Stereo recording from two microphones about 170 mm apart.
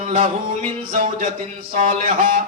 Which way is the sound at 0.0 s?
50° right (ahead or behind).